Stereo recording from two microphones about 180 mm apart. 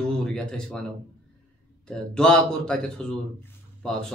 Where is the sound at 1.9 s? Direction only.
5° left (ahead or behind).